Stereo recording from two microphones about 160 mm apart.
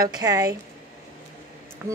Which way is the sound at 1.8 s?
15° right (ahead or behind).